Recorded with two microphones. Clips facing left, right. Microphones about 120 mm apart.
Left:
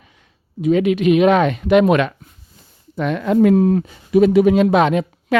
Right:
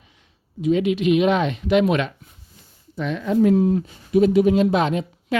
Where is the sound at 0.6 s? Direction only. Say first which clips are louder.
Left 4 dB; 60° left (ahead or behind).